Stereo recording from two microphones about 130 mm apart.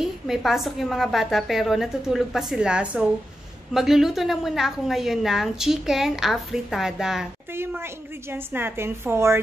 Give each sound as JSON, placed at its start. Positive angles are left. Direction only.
{"t": 0.0, "sound": "a woman's voice", "side_deg": -5}
{"t": 7.5, "sound": "a woman's voice", "side_deg": -20}